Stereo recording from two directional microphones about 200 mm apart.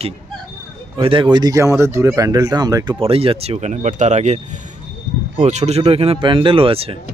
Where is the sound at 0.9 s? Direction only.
25° right (ahead or behind).